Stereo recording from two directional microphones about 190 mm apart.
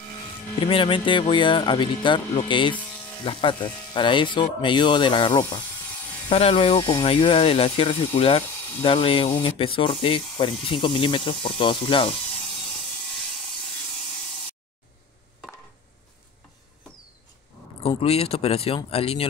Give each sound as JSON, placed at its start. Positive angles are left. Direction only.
{"t": 0.6, "sound": "speech", "side_deg": 30}
{"t": 6.3, "sound": "speech", "side_deg": 30}
{"t": 17.8, "sound": "speech", "side_deg": 30}